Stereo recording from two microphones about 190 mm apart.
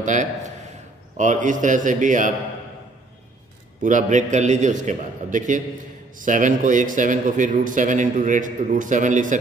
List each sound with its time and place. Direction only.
0.0 s a man's voice: 40° right (ahead or behind)
3.8 s a man's voice: 40° right (ahead or behind)